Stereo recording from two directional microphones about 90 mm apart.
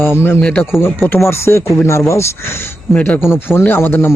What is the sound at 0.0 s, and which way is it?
Speech, 25° left (ahead or behind).